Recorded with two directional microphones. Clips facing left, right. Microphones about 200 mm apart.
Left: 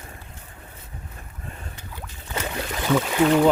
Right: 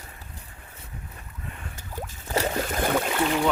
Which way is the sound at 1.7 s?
45° right (ahead or behind).